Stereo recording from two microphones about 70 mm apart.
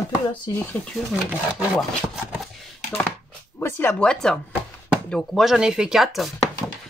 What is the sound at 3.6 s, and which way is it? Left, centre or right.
Speech, left.